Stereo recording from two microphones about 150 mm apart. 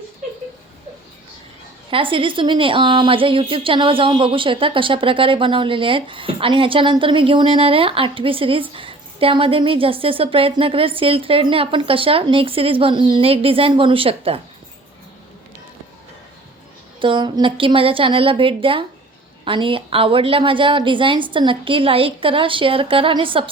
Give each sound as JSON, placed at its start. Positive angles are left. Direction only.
{"t": 1.9, "sound": "a woman's voice", "side_deg": -35}
{"t": 17.0, "sound": "a woman's voice", "side_deg": -30}